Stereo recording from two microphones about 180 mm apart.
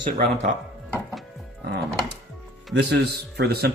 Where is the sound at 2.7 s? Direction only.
65° right (ahead or behind).